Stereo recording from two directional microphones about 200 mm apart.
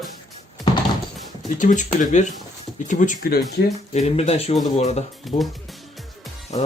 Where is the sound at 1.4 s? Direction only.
40° left (ahead or behind).